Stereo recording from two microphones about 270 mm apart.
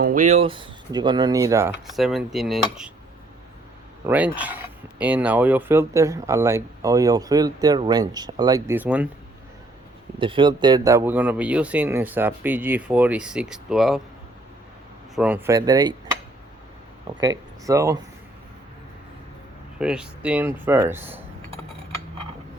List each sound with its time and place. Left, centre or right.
0.0 s speech: right; by 2.9 s centre
4.0 s speech: centre
10.2 s speech: centre
15.1 s speech: centre
17.2 s speech: centre
19.8 s speech: centre